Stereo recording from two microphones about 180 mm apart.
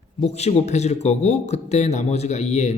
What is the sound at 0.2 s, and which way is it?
Speech, 35° left (ahead or behind).